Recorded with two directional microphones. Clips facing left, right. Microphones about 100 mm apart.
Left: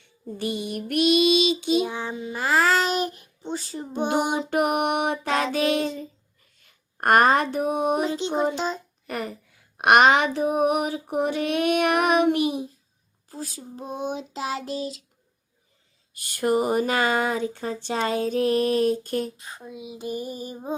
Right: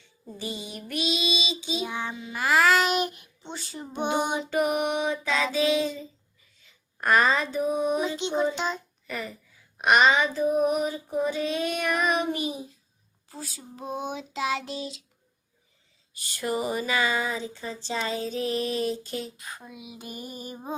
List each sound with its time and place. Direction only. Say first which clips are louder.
0.0 s female singing: left 7 dB; 60° left (ahead or behind)
1.9 s child singing: left 3 dB; 35° left (ahead or behind)
4.4 s female singing: left 3 dB; 55° left (ahead or behind)
6.6 s a sound: left 4 dB; 55° left (ahead or behind)
8.1 s child singing: left 2 dB; 40° left (ahead or behind)
9.0 s speech: left 4 dB; 55° left (ahead or behind)
9.7 s female singing: left 4 dB; 60° left (ahead or behind)
13.4 s child singing: left 3 dB; 40° left (ahead or behind)
16.1 s speech: left 7 dB; 55° left (ahead or behind)
19.4 s speech: left 3 dB; 30° left (ahead or behind)